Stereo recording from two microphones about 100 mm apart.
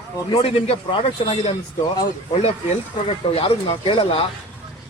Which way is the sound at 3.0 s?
65° left (ahead or behind).